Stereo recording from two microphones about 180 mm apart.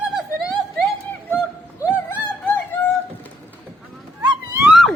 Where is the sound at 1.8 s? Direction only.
15° left (ahead or behind).